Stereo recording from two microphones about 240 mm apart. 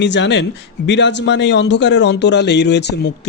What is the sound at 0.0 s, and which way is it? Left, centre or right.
Speech, left.